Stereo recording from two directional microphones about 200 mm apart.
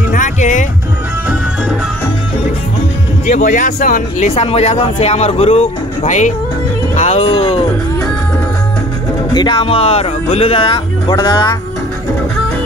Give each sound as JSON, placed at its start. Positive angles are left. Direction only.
{"t": 0.1, "sound": "music", "side_deg": 40}
{"t": 3.3, "sound": "speech", "side_deg": 40}
{"t": 9.3, "sound": "speech", "side_deg": 25}